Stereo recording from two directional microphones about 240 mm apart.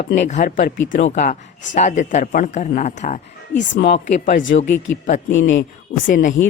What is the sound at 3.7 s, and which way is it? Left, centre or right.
Speech, left.